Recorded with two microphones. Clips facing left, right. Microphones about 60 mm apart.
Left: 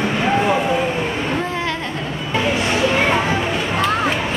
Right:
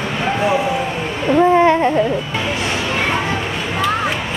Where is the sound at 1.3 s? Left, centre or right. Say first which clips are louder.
Right 10 dB; right.